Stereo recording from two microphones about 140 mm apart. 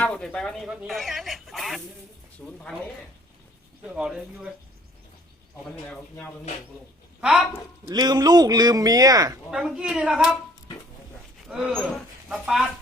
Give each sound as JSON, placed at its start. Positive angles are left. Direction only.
{"t": 0.0, "sound": "speech", "side_deg": 5}
{"t": 3.8, "sound": "speech", "side_deg": -5}
{"t": 5.6, "sound": "speech", "side_deg": 5}
{"t": 7.2, "sound": "speech", "side_deg": -5}
{"t": 7.9, "sound": "speech", "side_deg": -30}
{"t": 9.5, "sound": "speech", "side_deg": -5}
{"t": 11.4, "sound": "speech", "side_deg": -5}